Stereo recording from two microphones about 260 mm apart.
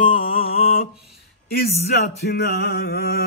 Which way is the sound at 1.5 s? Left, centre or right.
Left.